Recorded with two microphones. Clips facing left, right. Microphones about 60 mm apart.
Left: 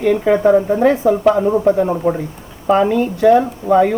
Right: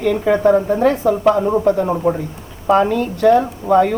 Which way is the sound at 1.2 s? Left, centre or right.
Centre.